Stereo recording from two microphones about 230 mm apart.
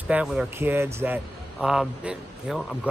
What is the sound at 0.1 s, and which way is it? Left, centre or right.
Speech, centre.